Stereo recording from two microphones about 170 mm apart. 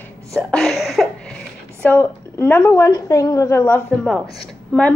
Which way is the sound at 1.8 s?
10° left (ahead or behind).